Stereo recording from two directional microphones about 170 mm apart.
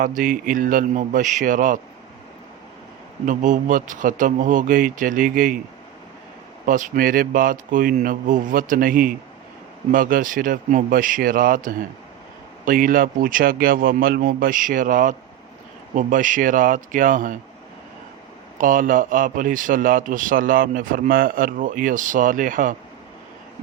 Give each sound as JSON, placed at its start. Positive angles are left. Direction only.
{"t": 0.0, "sound": "a man's voice", "side_deg": -55}
{"t": 3.2, "sound": "a man's voice", "side_deg": -50}
{"t": 6.7, "sound": "a man's voice", "side_deg": -50}
{"t": 18.5, "sound": "a man's voice", "side_deg": -50}